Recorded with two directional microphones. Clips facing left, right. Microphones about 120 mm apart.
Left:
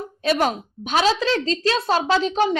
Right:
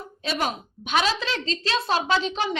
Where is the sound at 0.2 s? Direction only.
50° left (ahead or behind).